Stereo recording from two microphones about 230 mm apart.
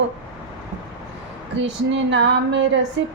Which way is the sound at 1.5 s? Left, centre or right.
Right.